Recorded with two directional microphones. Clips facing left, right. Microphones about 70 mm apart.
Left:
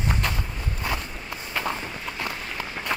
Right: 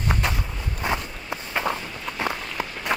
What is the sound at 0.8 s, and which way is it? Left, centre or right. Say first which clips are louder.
Walk: right 4 dB; right.